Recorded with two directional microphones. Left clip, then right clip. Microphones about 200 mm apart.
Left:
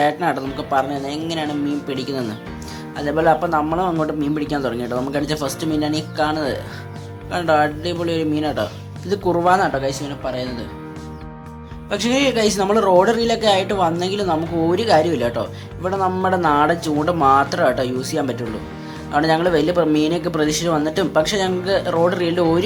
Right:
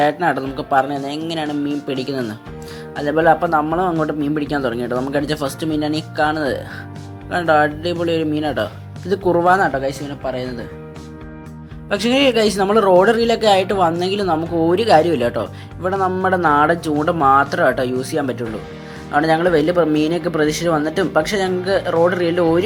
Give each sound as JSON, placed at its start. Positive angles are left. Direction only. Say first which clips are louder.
{"t": 0.0, "sound": "speech", "louder": "right 2 dB", "side_deg": -20}
{"t": 11.9, "sound": "speech", "louder": "right 3 dB", "side_deg": -20}